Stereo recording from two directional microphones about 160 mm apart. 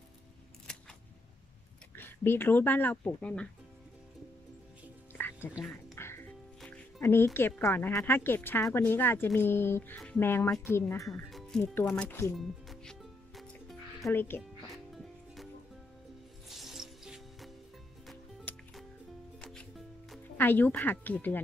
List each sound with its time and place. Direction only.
0.7 s scissors: 5° left (ahead or behind)
2.0 s speech: 15° left (ahead or behind)
5.1 s music: 15° left (ahead or behind)
7.0 s speech: 15° left (ahead or behind)
11.2 s music: centre (ahead or behind)
11.7 s speech: 10° left (ahead or behind)
12.4 s music: centre (ahead or behind)
14.1 s speech: 15° left (ahead or behind)
14.4 s music: centre (ahead or behind)
16.4 s music: centre (ahead or behind)
20.3 s speech: 10° left (ahead or behind)